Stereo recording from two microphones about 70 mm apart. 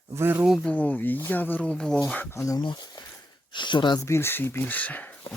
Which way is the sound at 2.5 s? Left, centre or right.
Left.